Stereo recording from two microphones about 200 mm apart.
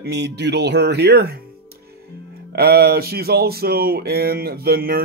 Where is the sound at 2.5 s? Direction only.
50° right (ahead or behind).